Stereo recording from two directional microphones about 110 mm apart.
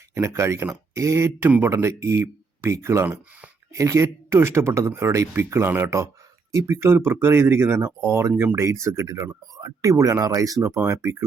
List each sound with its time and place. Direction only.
0.1 s speech: 25° right (ahead or behind)